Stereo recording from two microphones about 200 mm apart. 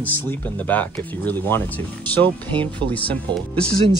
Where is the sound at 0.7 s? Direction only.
10° left (ahead or behind).